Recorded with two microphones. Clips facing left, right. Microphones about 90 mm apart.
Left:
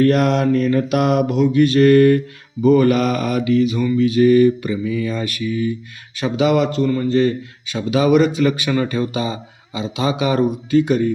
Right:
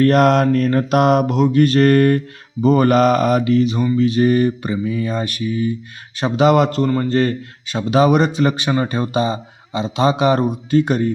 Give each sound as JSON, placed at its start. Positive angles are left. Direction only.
{"t": 0.0, "sound": "mantra", "side_deg": -45}
{"t": 2.6, "sound": "a man's voice", "side_deg": -35}